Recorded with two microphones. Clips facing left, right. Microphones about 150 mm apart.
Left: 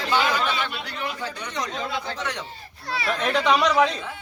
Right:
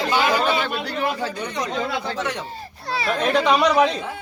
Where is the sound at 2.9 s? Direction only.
30° right (ahead or behind).